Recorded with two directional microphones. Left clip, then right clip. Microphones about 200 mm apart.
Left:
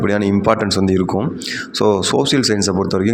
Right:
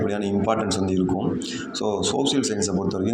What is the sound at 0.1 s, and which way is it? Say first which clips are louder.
Speech: left 8 dB; 40° left (ahead or behind).